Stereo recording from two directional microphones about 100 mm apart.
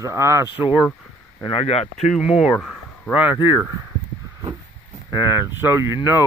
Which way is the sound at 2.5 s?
5° left (ahead or behind).